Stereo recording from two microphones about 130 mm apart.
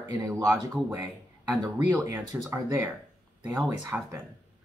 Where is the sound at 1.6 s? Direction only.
25° right (ahead or behind).